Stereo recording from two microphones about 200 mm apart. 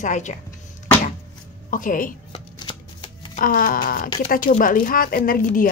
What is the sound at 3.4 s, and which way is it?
A woman's voice, 45° left (ahead or behind).